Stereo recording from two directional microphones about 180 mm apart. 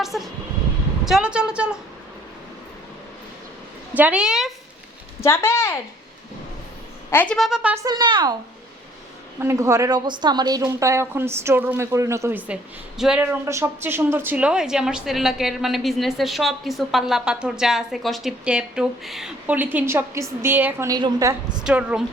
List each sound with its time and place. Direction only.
0.1 s a woman's voice: centre (ahead or behind)
3.9 s a woman's voice: 5° right (ahead or behind)
5.2 s a woman's voice: 15° left (ahead or behind)
7.1 s a woman's voice: 10° left (ahead or behind); by 7.9 s 10° right (ahead or behind)
7.9 s a woman's voice: 25° right (ahead or behind)
9.4 s a woman's voice: 15° right (ahead or behind)
13.0 s a woman's voice: 5° right (ahead or behind)
13.4 s a woman's voice: 15° right (ahead or behind)
21.6 s a woman's voice: 5° right (ahead or behind)